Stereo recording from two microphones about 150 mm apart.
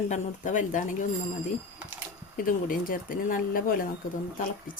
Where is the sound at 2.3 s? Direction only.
70° left (ahead or behind).